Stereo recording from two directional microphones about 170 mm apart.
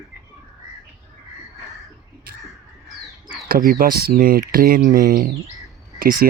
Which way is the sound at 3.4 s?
60° right (ahead or behind).